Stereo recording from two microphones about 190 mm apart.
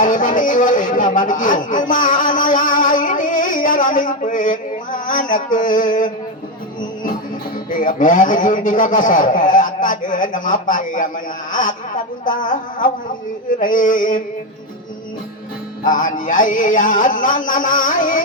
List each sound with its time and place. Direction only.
0.0 s speech: 45° left (ahead or behind)
7.7 s a man's voice: 45° left (ahead or behind)
12.2 s a man's voice: 45° left (ahead or behind)
15.9 s a man's voice: 45° left (ahead or behind)